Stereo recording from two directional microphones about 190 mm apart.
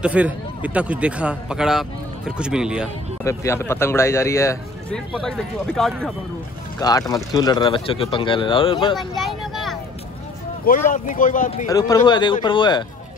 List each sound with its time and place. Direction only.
0.0 s a man's voice: 5° right (ahead or behind)
3.3 s speech: 15° left (ahead or behind)
4.9 s a man's voice: 5° left (ahead or behind)
6.8 s speech: 20° left (ahead or behind)
8.9 s vehicle: centre (ahead or behind)
10.6 s speech: 45° left (ahead or behind)
11.7 s speech: 20° left (ahead or behind)